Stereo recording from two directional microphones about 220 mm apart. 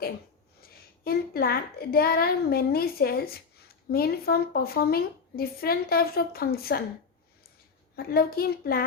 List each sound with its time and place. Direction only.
0.6 s a woman's voice: 40° left (ahead or behind)
7.9 s a woman's voice: 45° left (ahead or behind)